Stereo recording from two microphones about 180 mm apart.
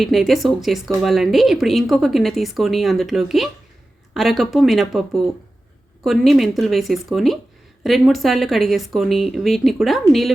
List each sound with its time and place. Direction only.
0.0 s speech: centre (ahead or behind)